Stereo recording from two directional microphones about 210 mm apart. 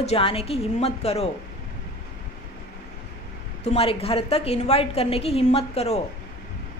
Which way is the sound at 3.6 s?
30° left (ahead or behind).